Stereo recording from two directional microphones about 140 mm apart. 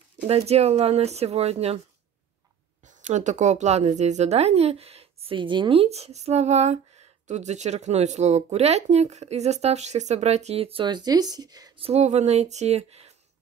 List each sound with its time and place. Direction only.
0.3 s speech: 45° right (ahead or behind)
3.1 s speech: 60° right (ahead or behind); by 11.7 s 30° right (ahead or behind)
11.8 s speech: 50° right (ahead or behind)